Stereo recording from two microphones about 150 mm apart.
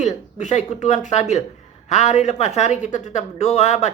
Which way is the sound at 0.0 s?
50° left (ahead or behind).